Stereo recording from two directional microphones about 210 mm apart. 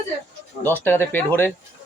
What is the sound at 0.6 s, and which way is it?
Speech, 10° left (ahead or behind).